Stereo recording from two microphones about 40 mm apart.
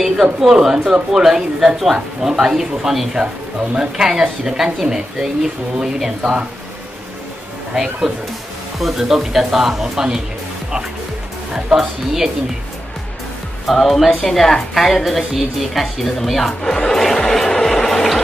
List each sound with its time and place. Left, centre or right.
0.0 s speech: centre
7.7 s speech: centre
8.7 s speech: centre
11.5 s speech: centre
13.7 s a woman's voice: centre
16.6 s music: centre